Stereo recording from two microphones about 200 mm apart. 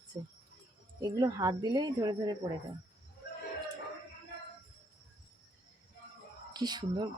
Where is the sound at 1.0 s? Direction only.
20° right (ahead or behind).